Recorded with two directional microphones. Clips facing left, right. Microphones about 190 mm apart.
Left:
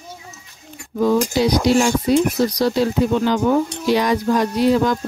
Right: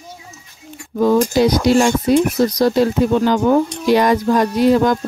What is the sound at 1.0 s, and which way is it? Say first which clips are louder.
Speech: right 3 dB; 50° right (ahead or behind).